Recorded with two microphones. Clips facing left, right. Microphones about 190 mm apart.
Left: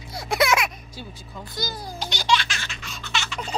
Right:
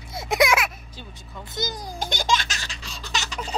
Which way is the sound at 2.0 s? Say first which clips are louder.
Left 1 dB; 50° right (ahead or behind).